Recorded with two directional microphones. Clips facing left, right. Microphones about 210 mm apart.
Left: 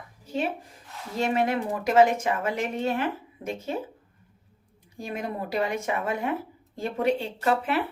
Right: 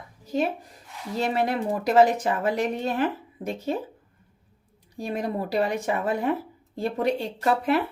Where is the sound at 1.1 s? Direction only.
35° right (ahead or behind).